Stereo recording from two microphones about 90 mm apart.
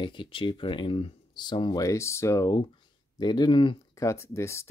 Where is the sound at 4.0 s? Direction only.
30° left (ahead or behind).